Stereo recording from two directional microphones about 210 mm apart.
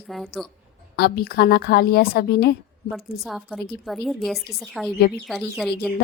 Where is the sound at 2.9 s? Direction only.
Centre (ahead or behind).